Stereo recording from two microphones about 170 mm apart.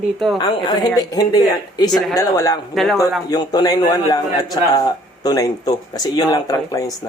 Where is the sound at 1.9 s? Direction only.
Centre (ahead or behind).